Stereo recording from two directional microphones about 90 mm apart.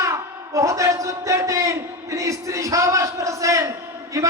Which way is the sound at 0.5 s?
35° right (ahead or behind).